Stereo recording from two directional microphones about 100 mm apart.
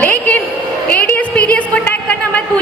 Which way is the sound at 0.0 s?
15° left (ahead or behind).